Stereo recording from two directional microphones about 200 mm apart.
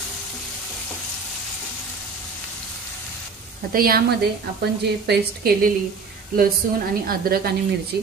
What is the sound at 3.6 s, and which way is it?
A woman's voice, 45° right (ahead or behind).